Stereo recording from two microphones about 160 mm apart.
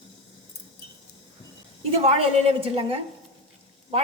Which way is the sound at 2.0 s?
40° right (ahead or behind).